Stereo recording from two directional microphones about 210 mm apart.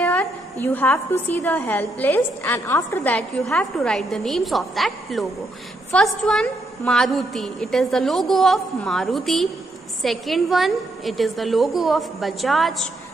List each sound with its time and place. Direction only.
0.0 s a woman's voice: 10° left (ahead or behind)